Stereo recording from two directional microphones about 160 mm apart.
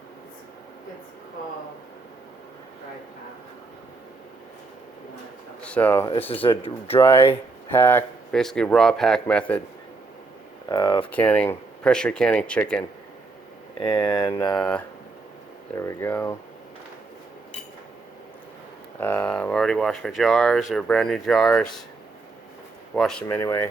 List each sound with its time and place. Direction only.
5.6 s speech: 10° left (ahead or behind)
6.3 s speech: 35° left (ahead or behind)
7.0 s speech: 15° left (ahead or behind)
10.7 s speech: 25° left (ahead or behind)
11.1 s speech: 10° left (ahead or behind)
13.7 s speech: 30° left (ahead or behind)
14.6 s speech: 10° left (ahead or behind)
18.9 s speech: 10° left (ahead or behind)
23.0 s speech: 5° left (ahead or behind)
23.4 s speech: 15° left (ahead or behind)